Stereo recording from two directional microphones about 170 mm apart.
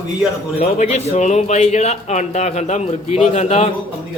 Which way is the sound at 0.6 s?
45° left (ahead or behind).